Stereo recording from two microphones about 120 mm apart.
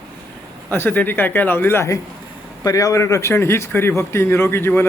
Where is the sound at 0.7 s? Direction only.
15° left (ahead or behind).